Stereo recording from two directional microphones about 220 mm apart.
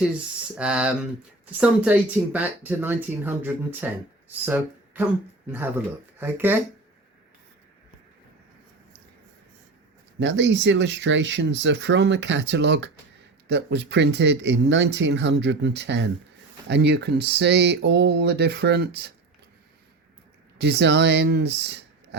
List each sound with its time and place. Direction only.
0.0 s speech: 5° right (ahead or behind)
10.2 s speech: 55° right (ahead or behind)
20.6 s speech: 50° right (ahead or behind)